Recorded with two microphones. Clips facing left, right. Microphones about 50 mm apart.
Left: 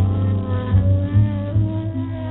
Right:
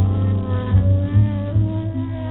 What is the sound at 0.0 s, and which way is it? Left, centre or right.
Music, left.